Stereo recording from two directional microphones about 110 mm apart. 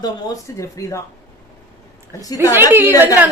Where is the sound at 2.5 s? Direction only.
20° right (ahead or behind).